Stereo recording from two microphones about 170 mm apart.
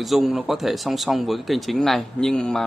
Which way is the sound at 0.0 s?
Centre (ahead or behind).